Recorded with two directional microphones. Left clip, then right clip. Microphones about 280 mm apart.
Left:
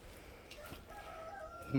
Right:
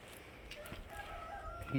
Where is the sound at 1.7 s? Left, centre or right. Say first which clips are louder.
Left 3 dB; centre.